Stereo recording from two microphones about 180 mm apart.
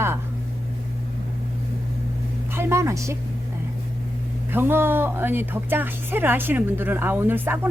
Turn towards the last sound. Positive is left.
turn(degrees=-10)  # may be behind; listen again after turning